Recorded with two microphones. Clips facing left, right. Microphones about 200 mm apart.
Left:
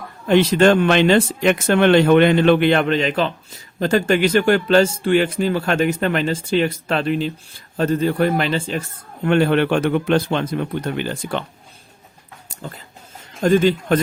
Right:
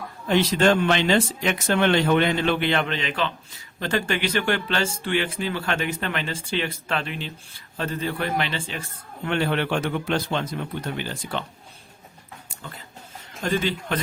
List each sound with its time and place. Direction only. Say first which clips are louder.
0.3 s a man's voice: left 6 dB; 60° left (ahead or behind)
13.4 s speech: left 10 dB; 45° left (ahead or behind)